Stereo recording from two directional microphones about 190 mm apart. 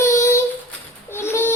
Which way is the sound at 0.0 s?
15° left (ahead or behind).